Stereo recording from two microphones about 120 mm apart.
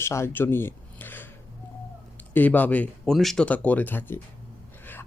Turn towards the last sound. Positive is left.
turn(degrees=15)  # may be behind; listen again after turning